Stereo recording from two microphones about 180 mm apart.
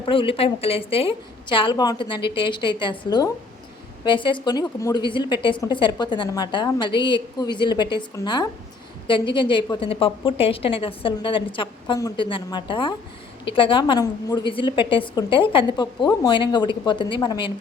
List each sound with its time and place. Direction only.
0.0 s a woman's voice: 30° left (ahead or behind)